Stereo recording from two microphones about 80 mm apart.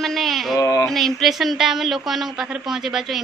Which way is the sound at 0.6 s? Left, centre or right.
Left.